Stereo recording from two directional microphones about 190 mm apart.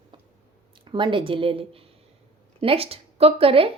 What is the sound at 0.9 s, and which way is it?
A woman's voice, 25° right (ahead or behind).